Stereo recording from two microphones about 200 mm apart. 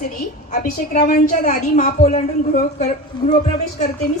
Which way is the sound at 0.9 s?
40° left (ahead or behind).